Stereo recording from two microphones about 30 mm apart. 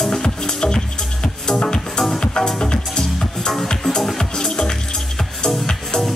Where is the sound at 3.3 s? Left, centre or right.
Centre.